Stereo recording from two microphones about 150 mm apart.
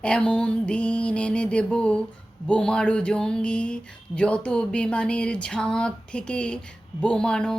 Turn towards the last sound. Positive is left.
turn(degrees=5)  # may be behind; listen again after turning